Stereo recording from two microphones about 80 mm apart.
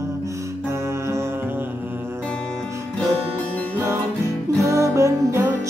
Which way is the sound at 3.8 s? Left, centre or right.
Right.